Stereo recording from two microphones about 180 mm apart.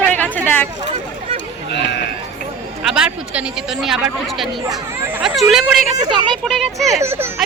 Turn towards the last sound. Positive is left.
turn(degrees=-15)  # may be behind; listen again after turning